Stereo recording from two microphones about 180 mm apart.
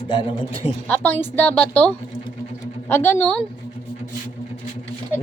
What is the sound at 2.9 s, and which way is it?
Speech, 10° left (ahead or behind).